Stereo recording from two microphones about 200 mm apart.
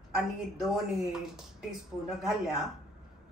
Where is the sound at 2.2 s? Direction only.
Centre (ahead or behind).